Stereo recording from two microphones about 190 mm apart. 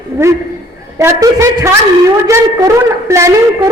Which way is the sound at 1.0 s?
15° right (ahead or behind).